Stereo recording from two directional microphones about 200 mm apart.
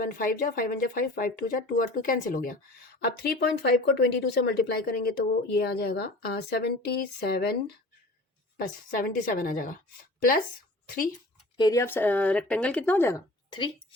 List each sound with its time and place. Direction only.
0.0 s speech: 45° left (ahead or behind)
8.5 s speech: 45° left (ahead or behind)
11.5 s speech: 20° left (ahead or behind)